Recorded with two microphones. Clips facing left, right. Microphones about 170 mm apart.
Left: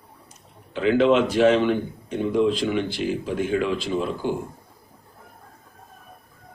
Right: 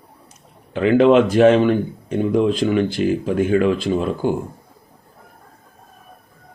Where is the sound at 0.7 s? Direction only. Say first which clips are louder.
Right 5 dB; 55° right (ahead or behind).